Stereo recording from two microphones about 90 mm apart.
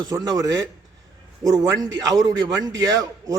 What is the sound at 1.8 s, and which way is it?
A man's voice, 45° right (ahead or behind).